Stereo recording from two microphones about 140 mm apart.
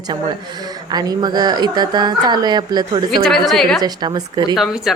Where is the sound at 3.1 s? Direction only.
Centre (ahead or behind).